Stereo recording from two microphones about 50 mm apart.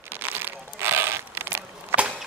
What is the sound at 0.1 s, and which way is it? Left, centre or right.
Crumpling, right.